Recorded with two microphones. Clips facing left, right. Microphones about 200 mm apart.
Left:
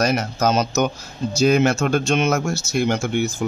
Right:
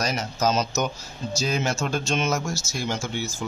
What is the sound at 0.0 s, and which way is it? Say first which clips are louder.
Speech: left 5 dB; 60° left (ahead or behind).